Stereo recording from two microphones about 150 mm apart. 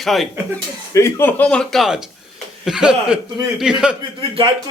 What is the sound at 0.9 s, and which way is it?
Speech, 15° left (ahead or behind).